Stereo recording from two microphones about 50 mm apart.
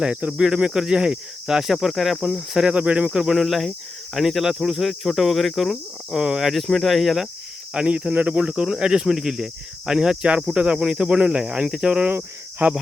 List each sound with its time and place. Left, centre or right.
0.0 s speech: right
0.3 s cricket: centre
2.6 s speech: right
3.1 s cricket: centre
7.7 s cricket: centre
10.4 s speech: centre
11.7 s cricket: centre
12.6 s cricket: right